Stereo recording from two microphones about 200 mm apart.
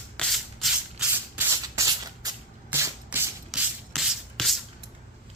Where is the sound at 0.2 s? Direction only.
Centre (ahead or behind).